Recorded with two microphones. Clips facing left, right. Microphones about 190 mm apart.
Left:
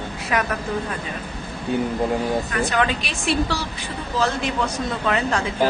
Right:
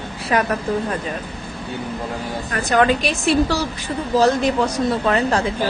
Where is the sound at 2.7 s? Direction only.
45° right (ahead or behind).